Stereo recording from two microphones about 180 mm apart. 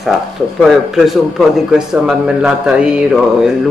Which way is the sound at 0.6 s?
Centre (ahead or behind).